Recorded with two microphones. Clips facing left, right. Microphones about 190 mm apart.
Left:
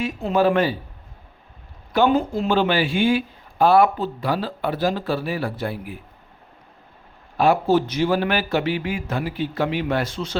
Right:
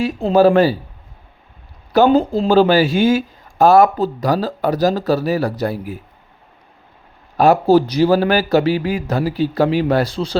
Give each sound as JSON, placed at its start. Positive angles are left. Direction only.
{"t": 0.0, "sound": "speech", "side_deg": -35}
{"t": 1.9, "sound": "speech", "side_deg": -35}
{"t": 7.3, "sound": "speech", "side_deg": -40}